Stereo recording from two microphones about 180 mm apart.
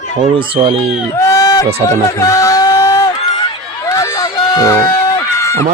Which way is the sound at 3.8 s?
15° left (ahead or behind).